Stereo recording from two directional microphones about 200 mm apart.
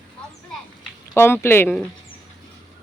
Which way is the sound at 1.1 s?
10° left (ahead or behind).